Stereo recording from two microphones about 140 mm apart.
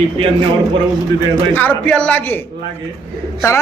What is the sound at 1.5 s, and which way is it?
A man's voice, 10° left (ahead or behind).